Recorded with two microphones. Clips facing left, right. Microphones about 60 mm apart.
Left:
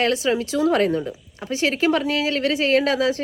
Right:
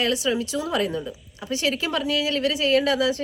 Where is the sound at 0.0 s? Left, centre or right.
Left.